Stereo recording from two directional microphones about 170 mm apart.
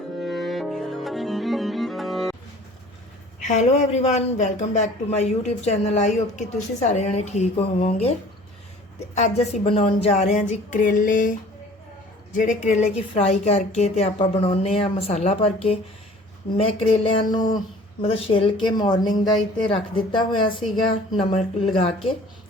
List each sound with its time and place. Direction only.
0.2 s cello: centre (ahead or behind)
3.4 s speech: 40° left (ahead or behind)
9.1 s a woman's voice: 40° left (ahead or behind)